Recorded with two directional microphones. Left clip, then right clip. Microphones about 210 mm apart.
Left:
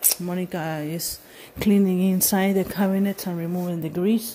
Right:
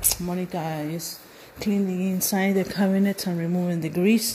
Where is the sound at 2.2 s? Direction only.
15° left (ahead or behind).